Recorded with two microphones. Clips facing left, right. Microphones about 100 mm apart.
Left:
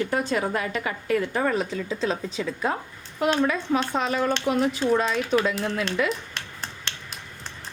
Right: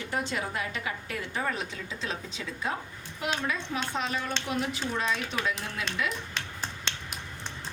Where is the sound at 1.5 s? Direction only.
40° left (ahead or behind).